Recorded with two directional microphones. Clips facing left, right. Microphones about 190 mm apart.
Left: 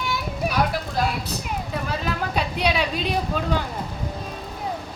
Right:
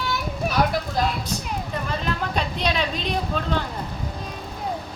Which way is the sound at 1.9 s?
5° left (ahead or behind).